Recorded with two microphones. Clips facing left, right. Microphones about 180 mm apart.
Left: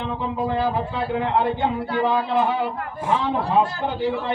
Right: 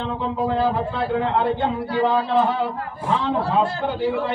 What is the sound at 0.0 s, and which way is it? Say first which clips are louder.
Speech: right 1 dB; 10° left (ahead or behind).